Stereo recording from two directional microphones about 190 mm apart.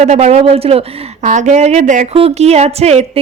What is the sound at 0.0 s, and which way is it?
Speech, 35° right (ahead or behind).